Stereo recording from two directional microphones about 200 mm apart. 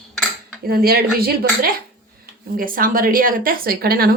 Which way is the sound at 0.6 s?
50° right (ahead or behind).